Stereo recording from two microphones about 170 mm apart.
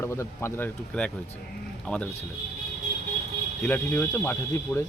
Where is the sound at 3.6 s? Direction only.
10° left (ahead or behind).